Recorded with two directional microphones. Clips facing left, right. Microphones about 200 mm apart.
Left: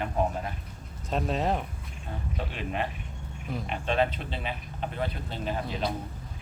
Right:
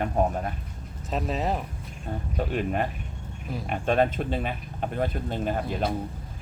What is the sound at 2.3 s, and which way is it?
Speech, 45° right (ahead or behind).